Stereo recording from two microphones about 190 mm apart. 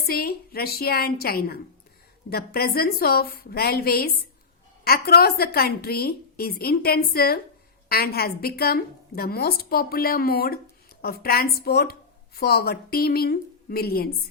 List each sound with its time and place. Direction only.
0.0 s a woman's voice: 50° left (ahead or behind)